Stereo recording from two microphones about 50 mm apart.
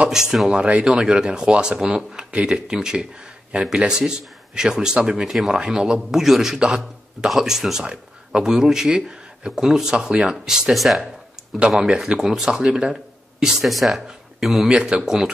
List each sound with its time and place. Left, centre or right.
0.1 s speech: centre
0.6 s speech: right; by 11.1 s centre
11.8 s speech: centre
14.7 s speech: centre